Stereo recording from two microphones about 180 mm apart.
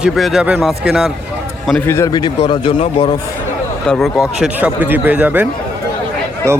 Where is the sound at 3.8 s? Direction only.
5° left (ahead or behind).